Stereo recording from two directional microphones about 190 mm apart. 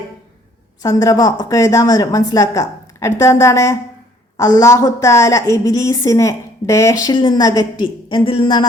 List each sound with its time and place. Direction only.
0.8 s a woman's voice: 20° left (ahead or behind)